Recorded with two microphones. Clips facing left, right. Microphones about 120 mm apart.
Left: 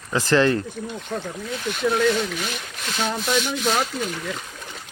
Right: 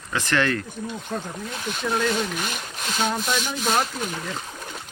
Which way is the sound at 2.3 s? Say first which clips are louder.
Even; 45° right (ahead or behind).